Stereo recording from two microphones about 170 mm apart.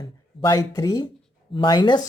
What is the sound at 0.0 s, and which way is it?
Speech, 20° left (ahead or behind).